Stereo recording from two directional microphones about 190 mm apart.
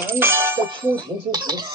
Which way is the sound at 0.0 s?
10° right (ahead or behind).